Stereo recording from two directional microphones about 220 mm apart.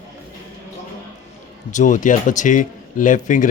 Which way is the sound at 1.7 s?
35° left (ahead or behind).